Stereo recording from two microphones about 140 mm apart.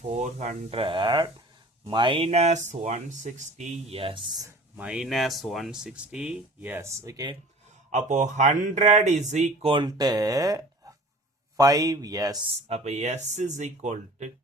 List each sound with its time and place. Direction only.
0.1 s speech: 55° right (ahead or behind); by 4.5 s 30° right (ahead or behind)
4.8 s speech: 5° right (ahead or behind); by 7.3 s 20° right (ahead or behind)
7.9 s speech: 60° right (ahead or behind)
9.6 s speech: 30° right (ahead or behind)
12.6 s speech: 50° right (ahead or behind)